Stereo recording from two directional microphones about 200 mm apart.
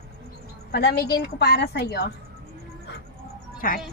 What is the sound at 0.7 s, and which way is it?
A woman's voice, 55° left (ahead or behind).